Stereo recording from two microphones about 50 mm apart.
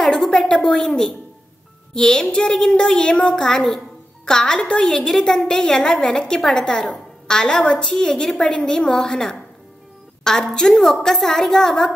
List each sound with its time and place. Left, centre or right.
0.1 s a sound: centre
0.5 s a woman's voice: centre
7.9 s a woman's voice: centre